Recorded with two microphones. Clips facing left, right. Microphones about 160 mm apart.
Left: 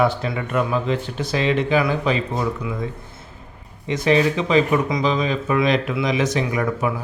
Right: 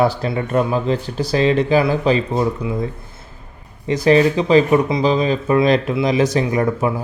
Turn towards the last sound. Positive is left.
turn(degrees=-35)  # may be behind; listen again after turning